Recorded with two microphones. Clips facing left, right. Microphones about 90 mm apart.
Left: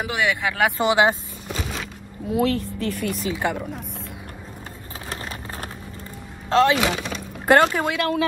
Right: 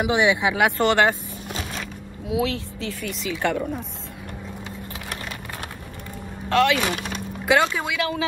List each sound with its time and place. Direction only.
0.1 s speech: 20° right (ahead or behind)
0.7 s speech: 15° left (ahead or behind)
2.2 s speech: 50° left (ahead or behind)
3.3 s speech: 20° left (ahead or behind)
6.5 s speech: 25° left (ahead or behind)
7.4 s speech: 50° left (ahead or behind)